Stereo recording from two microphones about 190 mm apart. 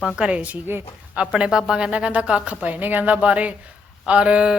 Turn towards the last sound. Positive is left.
turn(degrees=-5)  # may be behind; listen again after turning